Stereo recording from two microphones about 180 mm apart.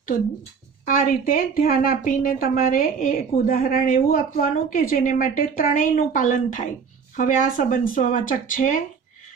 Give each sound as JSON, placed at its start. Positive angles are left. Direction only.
{"t": 0.9, "sound": "a woman's voice", "side_deg": 50}